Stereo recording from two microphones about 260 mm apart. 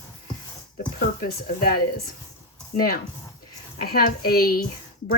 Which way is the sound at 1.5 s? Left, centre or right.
Left.